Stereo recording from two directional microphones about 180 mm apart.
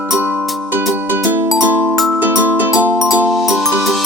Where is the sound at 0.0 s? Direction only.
10° right (ahead or behind).